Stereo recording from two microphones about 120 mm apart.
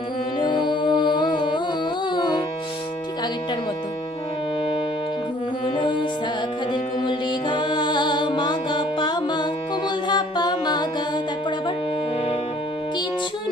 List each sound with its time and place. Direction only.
0.4 s music: 40° left (ahead or behind)
5.7 s music: 40° left (ahead or behind)